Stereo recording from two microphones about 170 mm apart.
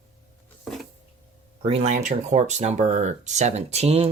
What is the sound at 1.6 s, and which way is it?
Speech, 35° right (ahead or behind).